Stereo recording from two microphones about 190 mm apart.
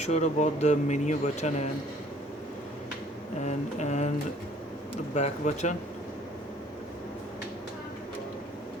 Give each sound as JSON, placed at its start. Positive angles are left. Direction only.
{"t": 0.0, "sound": "speech", "side_deg": 35}
{"t": 3.4, "sound": "speech", "side_deg": 40}
{"t": 5.1, "sound": "speech", "side_deg": 35}